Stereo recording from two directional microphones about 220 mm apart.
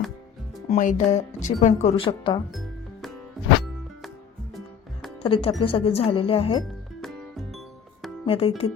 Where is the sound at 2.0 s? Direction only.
20° left (ahead or behind).